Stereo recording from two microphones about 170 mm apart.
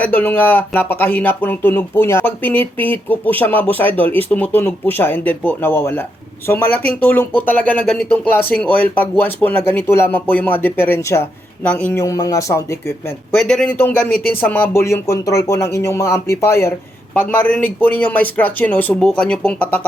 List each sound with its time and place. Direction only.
0.0 s speech: 10° left (ahead or behind)
13.3 s speech: 5° left (ahead or behind)